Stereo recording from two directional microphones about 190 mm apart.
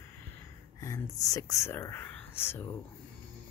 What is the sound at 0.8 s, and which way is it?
Speech, 15° left (ahead or behind).